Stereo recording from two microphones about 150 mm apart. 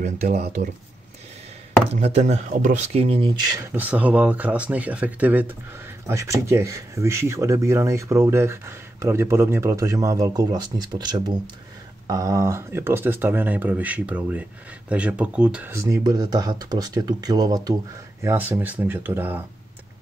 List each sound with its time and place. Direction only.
2.0 s speech: 50° right (ahead or behind)
3.5 s speech: 10° right (ahead or behind)
15.7 s speech: 20° right (ahead or behind)